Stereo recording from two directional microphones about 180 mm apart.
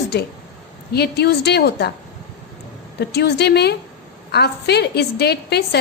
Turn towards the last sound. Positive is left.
turn(degrees=65)  # may be behind; listen again after turning